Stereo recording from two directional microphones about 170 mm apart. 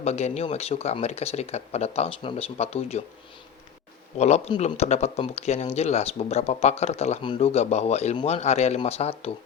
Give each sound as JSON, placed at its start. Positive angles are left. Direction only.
{"t": 0.0, "sound": "speech", "side_deg": 40}
{"t": 4.2, "sound": "speech", "side_deg": 40}